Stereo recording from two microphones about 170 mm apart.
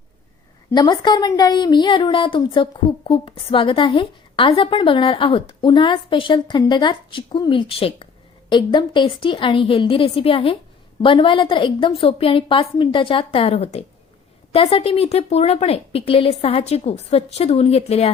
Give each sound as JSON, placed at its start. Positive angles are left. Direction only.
{"t": 0.7, "sound": "a woman's voice", "side_deg": 25}